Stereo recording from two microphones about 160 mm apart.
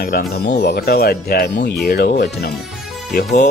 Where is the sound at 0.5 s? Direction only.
90° left.